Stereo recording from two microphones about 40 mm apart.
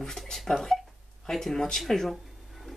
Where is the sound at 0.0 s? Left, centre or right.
Centre.